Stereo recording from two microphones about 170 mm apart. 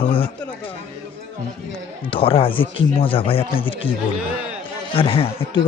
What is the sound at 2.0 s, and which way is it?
Speech, 30° left (ahead or behind).